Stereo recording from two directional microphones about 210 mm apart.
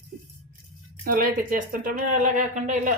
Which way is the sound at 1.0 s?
40° right (ahead or behind).